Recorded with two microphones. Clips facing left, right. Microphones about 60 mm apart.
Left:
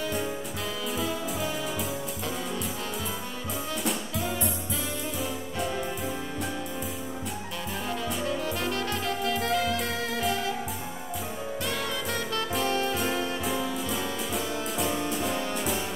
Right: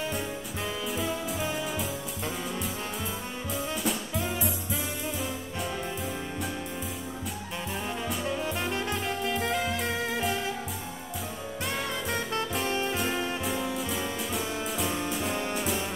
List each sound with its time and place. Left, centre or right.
1.0 s music: centre
8.3 s music: centre
12.6 s saxophone: right
12.9 s music: centre